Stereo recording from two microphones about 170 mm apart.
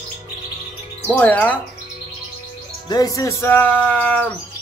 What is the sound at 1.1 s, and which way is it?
Speech, 10° left (ahead or behind).